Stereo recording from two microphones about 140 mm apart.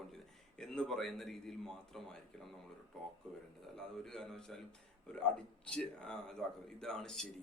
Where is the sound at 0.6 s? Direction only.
5° left (ahead or behind).